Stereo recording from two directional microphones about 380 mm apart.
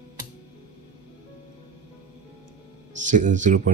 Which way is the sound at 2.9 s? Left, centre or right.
Centre.